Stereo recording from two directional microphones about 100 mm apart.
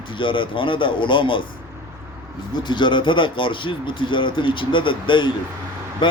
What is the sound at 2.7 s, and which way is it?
Speech, 50° left (ahead or behind).